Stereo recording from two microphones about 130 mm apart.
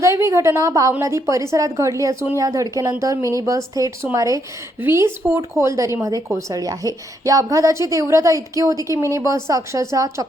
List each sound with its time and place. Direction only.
0.0 s speech: 20° right (ahead or behind)